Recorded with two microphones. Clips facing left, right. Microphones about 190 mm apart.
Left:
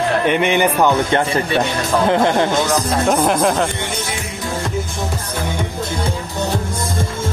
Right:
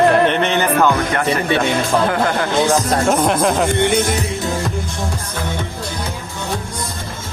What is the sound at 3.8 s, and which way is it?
Speech, 50° right (ahead or behind).